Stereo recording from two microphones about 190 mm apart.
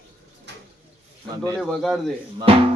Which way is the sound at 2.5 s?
30° right (ahead or behind).